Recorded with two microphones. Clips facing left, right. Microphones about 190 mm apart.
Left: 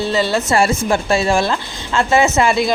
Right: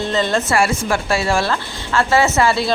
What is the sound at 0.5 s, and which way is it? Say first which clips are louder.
Speech: left 2 dB; 25° left (ahead or behind).